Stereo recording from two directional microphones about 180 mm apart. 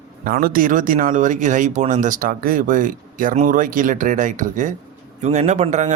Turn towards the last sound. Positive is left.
turn(degrees=-40)  # may be behind; listen again after turning